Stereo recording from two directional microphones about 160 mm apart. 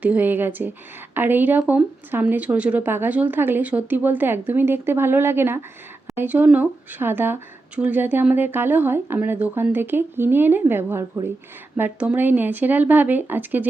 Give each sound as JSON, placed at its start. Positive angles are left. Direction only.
{"t": 0.0, "sound": "speech", "side_deg": -10}